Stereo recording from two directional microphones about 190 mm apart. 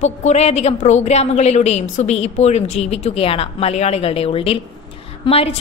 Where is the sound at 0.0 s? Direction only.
35° left (ahead or behind).